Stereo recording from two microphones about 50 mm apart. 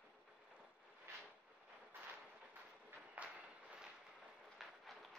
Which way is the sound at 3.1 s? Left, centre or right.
Right.